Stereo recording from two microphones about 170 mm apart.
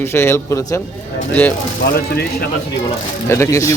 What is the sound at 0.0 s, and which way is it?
Speech, 15° left (ahead or behind).